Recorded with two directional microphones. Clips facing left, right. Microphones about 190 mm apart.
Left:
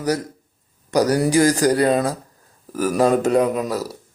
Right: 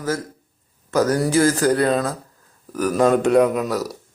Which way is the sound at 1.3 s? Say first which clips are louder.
Left 1 dB; 15° left (ahead or behind).